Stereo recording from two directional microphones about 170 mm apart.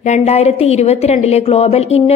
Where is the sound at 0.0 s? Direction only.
40° left (ahead or behind).